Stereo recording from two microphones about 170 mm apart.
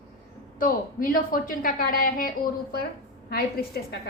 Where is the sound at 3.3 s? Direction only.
70° left (ahead or behind).